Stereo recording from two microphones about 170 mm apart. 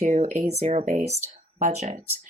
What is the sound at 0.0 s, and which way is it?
Speech, 40° right (ahead or behind).